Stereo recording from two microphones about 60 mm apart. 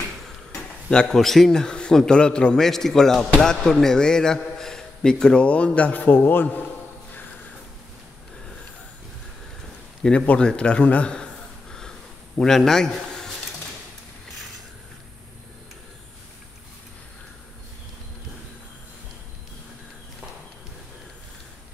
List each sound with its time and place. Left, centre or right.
0.8 s a man's voice: centre; by 6.6 s left
10.0 s a man's voice: centre
12.4 s a man's voice: centre